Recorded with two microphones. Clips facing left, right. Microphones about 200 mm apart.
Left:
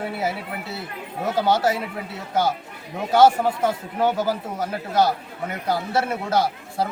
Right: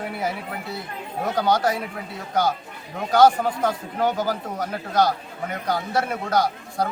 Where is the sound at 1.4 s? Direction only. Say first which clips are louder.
Left 1 dB; 25° left (ahead or behind).